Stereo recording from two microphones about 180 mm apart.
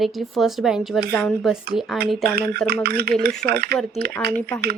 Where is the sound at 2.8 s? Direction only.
60° right (ahead or behind).